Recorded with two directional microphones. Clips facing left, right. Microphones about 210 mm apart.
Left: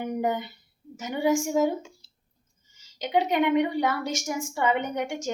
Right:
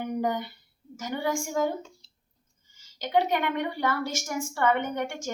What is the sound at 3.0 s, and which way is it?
A woman's voice, 15° left (ahead or behind).